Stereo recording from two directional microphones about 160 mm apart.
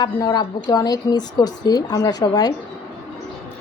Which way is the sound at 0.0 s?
25° left (ahead or behind).